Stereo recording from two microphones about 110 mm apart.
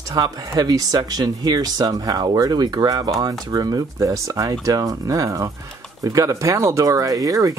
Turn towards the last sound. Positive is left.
turn(degrees=-30)  # may be behind; listen again after turning